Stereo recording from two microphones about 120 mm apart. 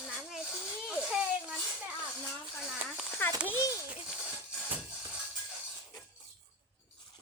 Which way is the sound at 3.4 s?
15° left (ahead or behind).